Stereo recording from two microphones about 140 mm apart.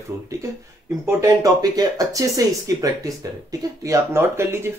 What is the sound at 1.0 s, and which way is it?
Speech, 25° right (ahead or behind).